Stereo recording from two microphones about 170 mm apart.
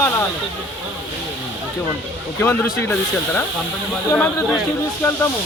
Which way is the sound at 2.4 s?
15° left (ahead or behind).